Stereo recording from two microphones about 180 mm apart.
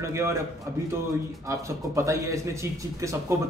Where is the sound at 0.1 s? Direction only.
15° right (ahead or behind).